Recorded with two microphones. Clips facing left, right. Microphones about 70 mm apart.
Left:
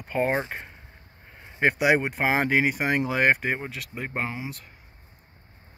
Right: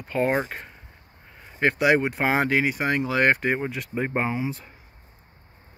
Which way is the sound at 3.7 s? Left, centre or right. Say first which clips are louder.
Right 7 dB; right.